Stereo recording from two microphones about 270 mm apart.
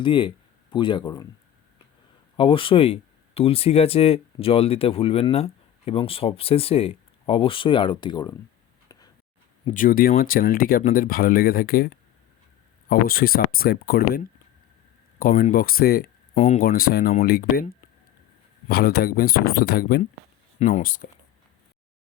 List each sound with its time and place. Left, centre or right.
0.0 s speech: centre
2.3 s speech: centre
9.6 s speech: left